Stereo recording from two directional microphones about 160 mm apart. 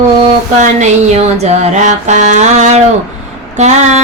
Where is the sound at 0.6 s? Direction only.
45° right (ahead or behind).